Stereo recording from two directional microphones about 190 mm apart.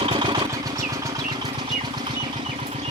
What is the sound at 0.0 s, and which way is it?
Vehicle, 25° right (ahead or behind).